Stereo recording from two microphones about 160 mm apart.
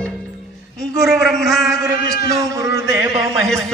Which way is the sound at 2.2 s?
20° right (ahead or behind).